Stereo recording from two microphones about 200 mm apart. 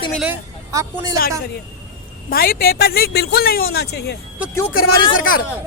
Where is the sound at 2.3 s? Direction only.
50° left (ahead or behind).